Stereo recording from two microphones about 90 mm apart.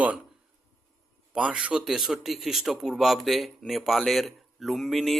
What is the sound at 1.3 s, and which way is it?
Speech, 10° right (ahead or behind).